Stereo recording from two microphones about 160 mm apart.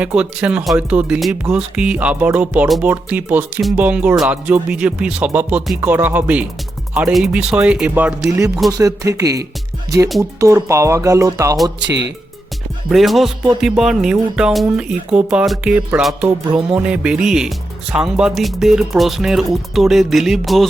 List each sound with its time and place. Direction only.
0.0 s speech: 5° right (ahead or behind)
8.4 s music: centre (ahead or behind)
8.8 s speech: 20° right (ahead or behind)
10.4 s speech: 20° right (ahead or behind)
11.8 s speech: 90° right
12.9 s music: centre (ahead or behind)